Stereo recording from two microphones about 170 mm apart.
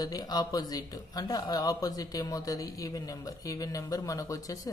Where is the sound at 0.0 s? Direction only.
25° left (ahead or behind).